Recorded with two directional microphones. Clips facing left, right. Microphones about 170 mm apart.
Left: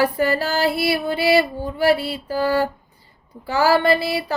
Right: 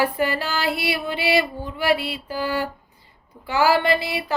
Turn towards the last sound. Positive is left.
turn(degrees=35)  # may be behind; listen again after turning